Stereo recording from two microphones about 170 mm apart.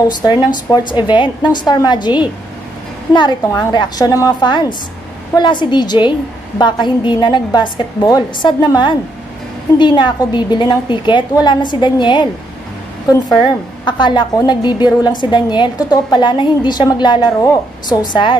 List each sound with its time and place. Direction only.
0.7 s a woman's voice: 10° left (ahead or behind)
1.0 s a woman's voice: 30° left (ahead or behind)
13.4 s a woman's voice: 25° left (ahead or behind)